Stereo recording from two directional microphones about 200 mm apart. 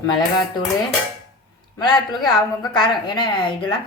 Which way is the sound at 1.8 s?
20° left (ahead or behind).